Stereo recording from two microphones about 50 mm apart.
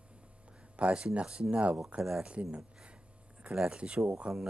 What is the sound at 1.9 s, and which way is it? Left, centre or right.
Speech, centre.